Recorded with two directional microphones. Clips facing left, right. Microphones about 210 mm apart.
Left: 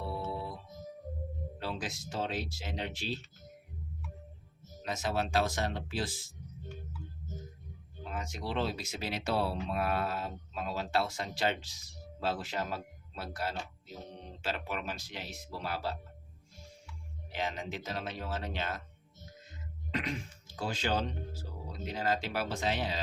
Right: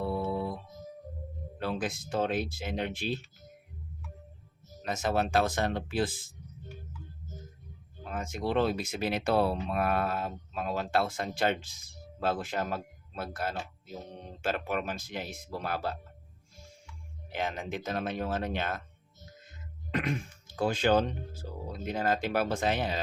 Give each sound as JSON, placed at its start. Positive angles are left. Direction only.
{"t": 0.0, "sound": "music", "side_deg": -55}
{"t": 1.5, "sound": "speech", "side_deg": -55}
{"t": 4.8, "sound": "speech", "side_deg": -50}
{"t": 8.0, "sound": "speech", "side_deg": -50}
{"t": 17.3, "sound": "speech", "side_deg": -55}
{"t": 19.9, "sound": "speech", "side_deg": -50}